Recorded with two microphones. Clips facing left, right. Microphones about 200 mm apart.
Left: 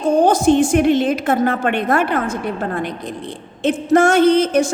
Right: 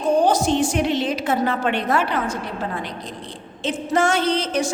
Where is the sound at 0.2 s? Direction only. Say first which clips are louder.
Left 5 dB; 50° left (ahead or behind).